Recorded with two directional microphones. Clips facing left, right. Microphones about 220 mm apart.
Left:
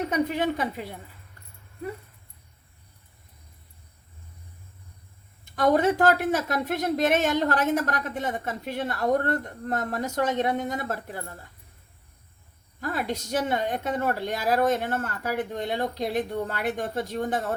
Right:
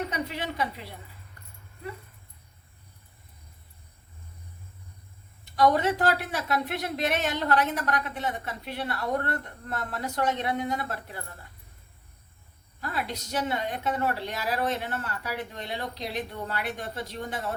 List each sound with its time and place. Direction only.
0.1 s a woman's voice: 50° left (ahead or behind)
5.5 s a woman's voice: 50° left (ahead or behind)
12.8 s a woman's voice: 45° left (ahead or behind)